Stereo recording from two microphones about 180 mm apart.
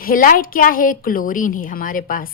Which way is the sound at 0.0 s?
50° left (ahead or behind).